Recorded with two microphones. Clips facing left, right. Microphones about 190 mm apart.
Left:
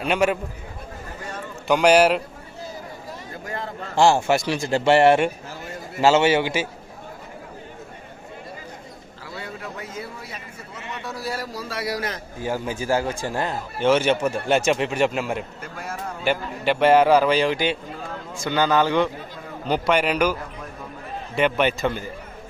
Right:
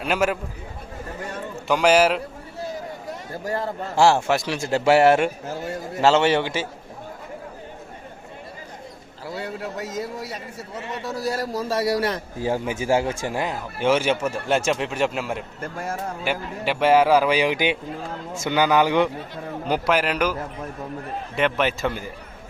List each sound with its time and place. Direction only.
0.0 s a man's voice: centre (ahead or behind)
1.6 s a man's voice: centre (ahead or behind)
3.4 s a man's voice: 35° right (ahead or behind)
3.9 s a man's voice: centre (ahead or behind)
9.6 s a man's voice: 40° right (ahead or behind)
12.4 s a man's voice: 25° right (ahead or behind)
13.3 s a man's voice: 10° right (ahead or behind)
15.6 s speech: 45° right (ahead or behind)
16.2 s a man's voice: 5° right (ahead or behind)
21.3 s a man's voice: centre (ahead or behind)